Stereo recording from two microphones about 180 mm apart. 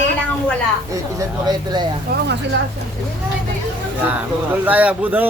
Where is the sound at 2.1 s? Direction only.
60° right (ahead or behind).